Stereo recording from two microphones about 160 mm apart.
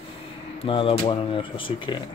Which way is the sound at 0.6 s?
35° left (ahead or behind).